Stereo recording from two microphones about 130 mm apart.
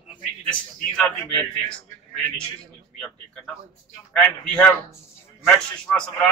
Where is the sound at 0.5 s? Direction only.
10° left (ahead or behind).